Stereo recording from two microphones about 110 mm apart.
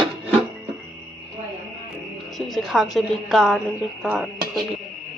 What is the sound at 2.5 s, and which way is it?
A woman's voice, centre (ahead or behind).